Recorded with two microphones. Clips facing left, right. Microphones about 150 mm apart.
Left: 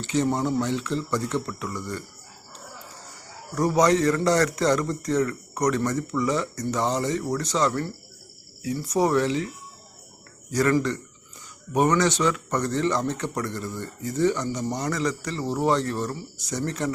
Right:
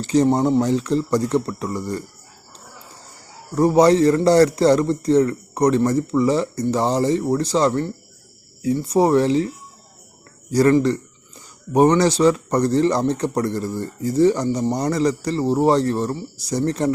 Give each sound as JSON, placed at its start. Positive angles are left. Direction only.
{"t": 0.0, "sound": "a man's voice", "side_deg": -35}
{"t": 3.5, "sound": "a man's voice", "side_deg": -30}
{"t": 10.5, "sound": "a man's voice", "side_deg": -35}